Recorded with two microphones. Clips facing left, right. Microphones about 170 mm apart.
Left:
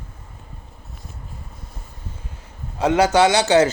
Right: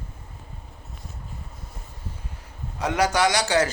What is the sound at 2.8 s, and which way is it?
Speech, 25° left (ahead or behind).